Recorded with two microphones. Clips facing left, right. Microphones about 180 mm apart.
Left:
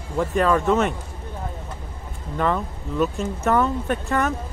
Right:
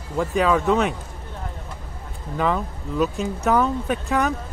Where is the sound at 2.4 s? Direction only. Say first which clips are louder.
Even; centre (ahead or behind).